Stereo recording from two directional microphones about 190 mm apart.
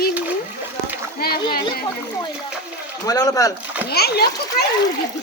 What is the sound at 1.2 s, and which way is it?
Speech, 55° left (ahead or behind).